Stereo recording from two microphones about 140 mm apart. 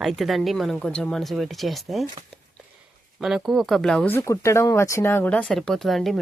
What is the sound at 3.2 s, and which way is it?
Speech, centre (ahead or behind).